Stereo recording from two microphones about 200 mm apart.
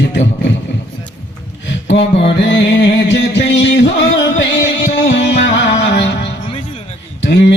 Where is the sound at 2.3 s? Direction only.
60° left (ahead or behind).